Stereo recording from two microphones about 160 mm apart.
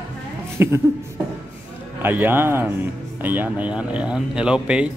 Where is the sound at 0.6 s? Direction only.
15° right (ahead or behind).